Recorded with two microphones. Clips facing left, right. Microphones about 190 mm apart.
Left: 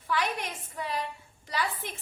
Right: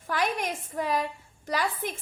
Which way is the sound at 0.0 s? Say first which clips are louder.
Right 2 dB; 50° right (ahead or behind).